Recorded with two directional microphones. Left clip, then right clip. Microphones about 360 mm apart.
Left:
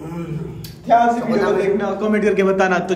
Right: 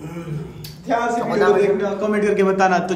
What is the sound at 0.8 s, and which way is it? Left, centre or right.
A man's voice, centre.